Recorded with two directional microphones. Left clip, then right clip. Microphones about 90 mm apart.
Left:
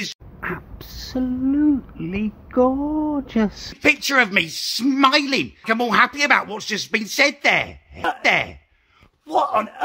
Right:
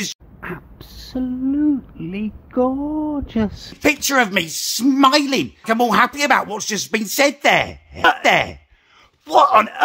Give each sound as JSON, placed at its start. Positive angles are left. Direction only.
{"t": 0.4, "sound": "speech", "side_deg": -30}
{"t": 7.9, "sound": "speech", "side_deg": 25}
{"t": 8.2, "sound": "a man's voice", "side_deg": -35}